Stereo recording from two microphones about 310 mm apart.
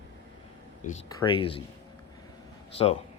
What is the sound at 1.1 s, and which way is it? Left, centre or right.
Speech, centre.